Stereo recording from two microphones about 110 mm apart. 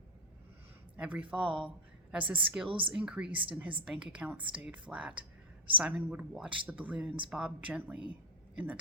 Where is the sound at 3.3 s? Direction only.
50° right (ahead or behind).